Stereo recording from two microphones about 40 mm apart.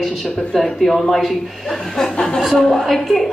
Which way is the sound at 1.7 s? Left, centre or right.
Centre.